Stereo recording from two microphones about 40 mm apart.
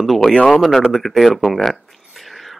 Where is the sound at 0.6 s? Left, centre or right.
Centre.